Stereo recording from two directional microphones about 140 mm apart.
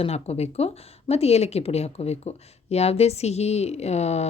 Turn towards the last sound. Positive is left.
turn(degrees=50)  # may be behind; listen again after turning